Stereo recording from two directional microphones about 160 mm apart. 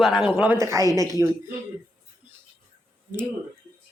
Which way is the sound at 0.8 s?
20° left (ahead or behind).